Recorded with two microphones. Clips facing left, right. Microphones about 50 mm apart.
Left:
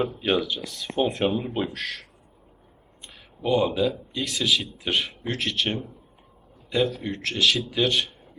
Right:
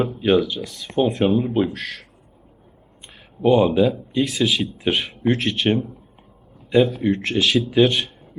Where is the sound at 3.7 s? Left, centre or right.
Centre.